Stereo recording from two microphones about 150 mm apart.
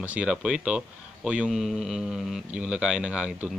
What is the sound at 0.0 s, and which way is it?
Speech, 10° right (ahead or behind).